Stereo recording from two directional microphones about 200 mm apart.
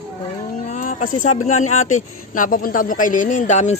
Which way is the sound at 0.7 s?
40° left (ahead or behind).